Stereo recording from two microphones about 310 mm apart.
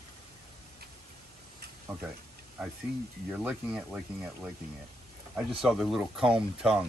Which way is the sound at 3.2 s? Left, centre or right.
Centre.